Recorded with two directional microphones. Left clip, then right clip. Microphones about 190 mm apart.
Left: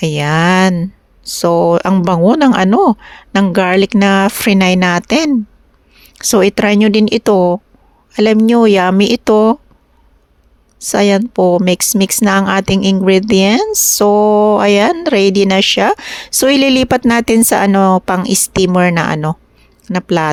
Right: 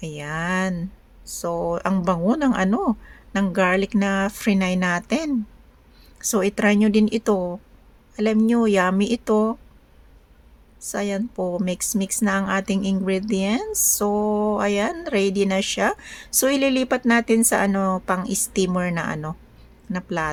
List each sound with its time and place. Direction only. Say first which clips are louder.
0.0 s speech: left 15 dB; 45° left (ahead or behind)
10.8 s speech: left 15 dB; 45° left (ahead or behind)